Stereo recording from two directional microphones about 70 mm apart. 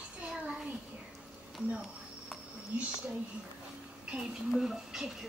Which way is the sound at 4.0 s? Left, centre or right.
Centre.